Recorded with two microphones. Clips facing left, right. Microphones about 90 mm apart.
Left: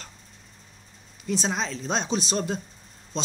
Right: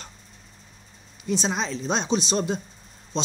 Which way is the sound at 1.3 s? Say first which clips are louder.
Right 2 dB; centre (ahead or behind).